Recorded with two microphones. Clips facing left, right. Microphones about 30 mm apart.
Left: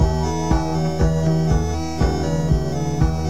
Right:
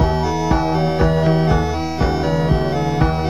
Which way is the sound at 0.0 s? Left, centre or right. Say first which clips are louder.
Right 4 dB; right.